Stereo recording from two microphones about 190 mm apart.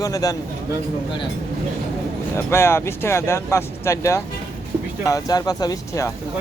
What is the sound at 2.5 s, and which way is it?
Speech, 15° left (ahead or behind).